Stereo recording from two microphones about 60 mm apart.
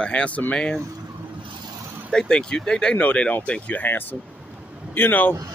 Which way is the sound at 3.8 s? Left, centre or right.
Left.